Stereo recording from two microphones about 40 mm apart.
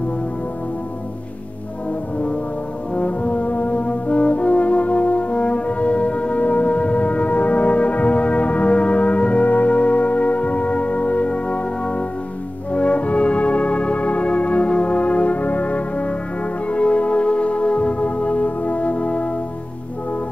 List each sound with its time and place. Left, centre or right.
3.0 s brass instrument: left
12.7 s music: left